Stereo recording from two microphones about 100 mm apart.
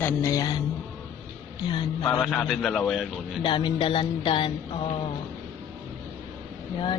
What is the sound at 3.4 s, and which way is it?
Speech, 50° left (ahead or behind).